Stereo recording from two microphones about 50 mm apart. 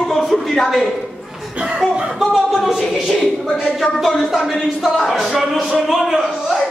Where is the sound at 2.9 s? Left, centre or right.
Centre.